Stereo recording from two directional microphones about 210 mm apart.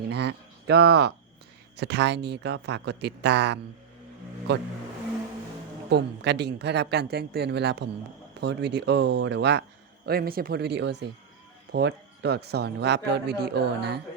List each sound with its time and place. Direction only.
0.1 s speech: 50° right (ahead or behind)
5.9 s speech: 55° right (ahead or behind)